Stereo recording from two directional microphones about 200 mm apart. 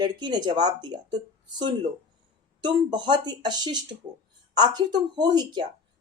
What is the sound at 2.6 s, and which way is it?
Speech, 20° right (ahead or behind).